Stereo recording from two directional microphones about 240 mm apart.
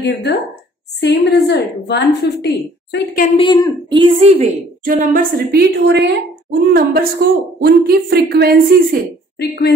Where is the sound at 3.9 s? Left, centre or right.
Right.